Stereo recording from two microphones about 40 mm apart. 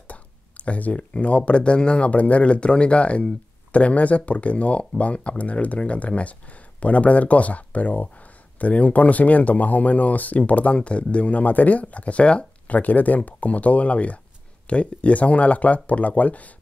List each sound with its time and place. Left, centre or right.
0.0 s speech: left
2.0 s speech: left
12.7 s speech: left